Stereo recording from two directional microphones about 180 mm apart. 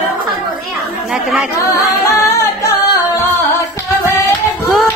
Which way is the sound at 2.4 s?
15° left (ahead or behind).